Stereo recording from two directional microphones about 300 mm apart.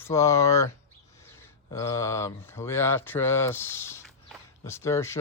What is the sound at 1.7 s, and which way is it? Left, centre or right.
Speech, centre.